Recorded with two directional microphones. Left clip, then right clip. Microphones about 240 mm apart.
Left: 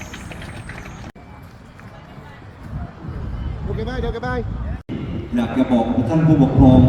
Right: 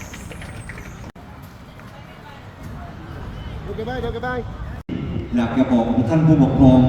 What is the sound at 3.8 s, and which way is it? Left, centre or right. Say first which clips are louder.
Speech: right 1 dB; left.